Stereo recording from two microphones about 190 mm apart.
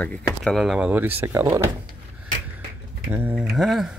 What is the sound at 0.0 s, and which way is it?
Speech, 5° left (ahead or behind).